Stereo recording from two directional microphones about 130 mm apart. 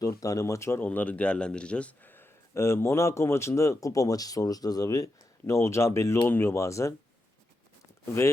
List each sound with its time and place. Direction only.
0.0 s speech: 25° left (ahead or behind)